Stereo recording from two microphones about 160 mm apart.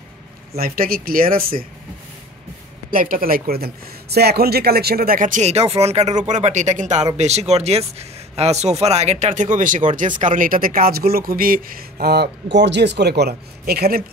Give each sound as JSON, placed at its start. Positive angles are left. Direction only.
{"t": 0.6, "sound": "speech", "side_deg": -65}
{"t": 2.9, "sound": "speech", "side_deg": -60}